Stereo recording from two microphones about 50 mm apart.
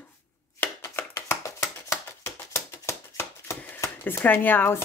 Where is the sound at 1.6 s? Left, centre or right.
Left.